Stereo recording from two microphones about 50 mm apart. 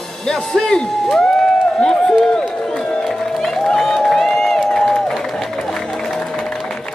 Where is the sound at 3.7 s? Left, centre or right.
Centre.